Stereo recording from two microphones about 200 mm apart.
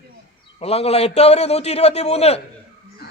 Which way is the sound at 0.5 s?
30° left (ahead or behind).